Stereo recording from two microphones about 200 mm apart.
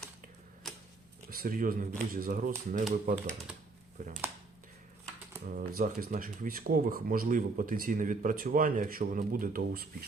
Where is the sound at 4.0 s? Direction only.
40° right (ahead or behind).